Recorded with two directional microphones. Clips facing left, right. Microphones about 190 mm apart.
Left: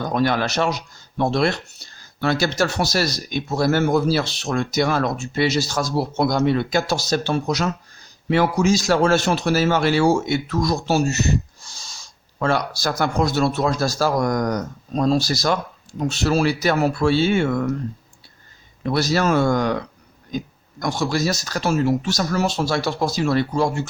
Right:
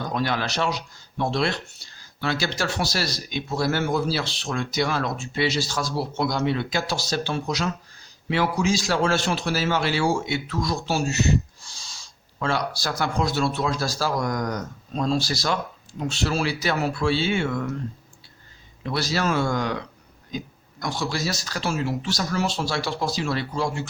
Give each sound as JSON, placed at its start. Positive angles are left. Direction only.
{"t": 0.1, "sound": "speech", "side_deg": 50}
{"t": 18.8, "sound": "speech", "side_deg": 45}